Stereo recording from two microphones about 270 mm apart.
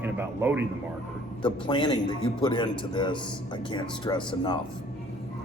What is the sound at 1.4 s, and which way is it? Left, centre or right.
A man's voice, centre.